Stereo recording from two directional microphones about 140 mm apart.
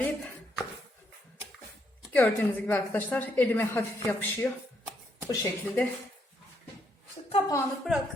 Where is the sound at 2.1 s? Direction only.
10° left (ahead or behind).